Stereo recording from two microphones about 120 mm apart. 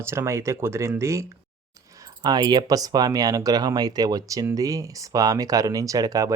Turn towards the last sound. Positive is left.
turn(degrees=-30)  # may be behind; listen again after turning